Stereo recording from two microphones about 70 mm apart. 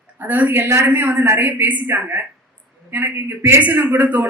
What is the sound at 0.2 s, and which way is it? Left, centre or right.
A man's voice, right.